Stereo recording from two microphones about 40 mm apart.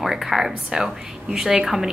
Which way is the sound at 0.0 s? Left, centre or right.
Centre.